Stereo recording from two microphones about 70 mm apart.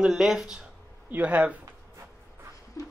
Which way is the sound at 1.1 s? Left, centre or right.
Right.